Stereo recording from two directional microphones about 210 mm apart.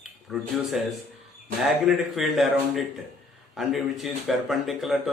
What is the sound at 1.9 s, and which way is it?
Speech, centre (ahead or behind).